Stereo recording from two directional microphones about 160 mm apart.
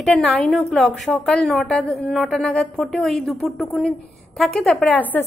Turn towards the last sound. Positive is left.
turn(degrees=10)  # may be behind; listen again after turning